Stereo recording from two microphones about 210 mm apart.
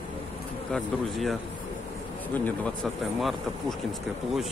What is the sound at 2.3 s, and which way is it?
Speech, 5° left (ahead or behind).